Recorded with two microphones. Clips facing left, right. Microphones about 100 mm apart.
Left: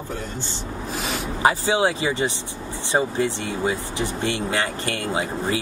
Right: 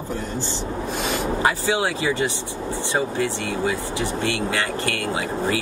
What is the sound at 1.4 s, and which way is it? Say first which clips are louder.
Speech: left 4 dB; 20° left (ahead or behind).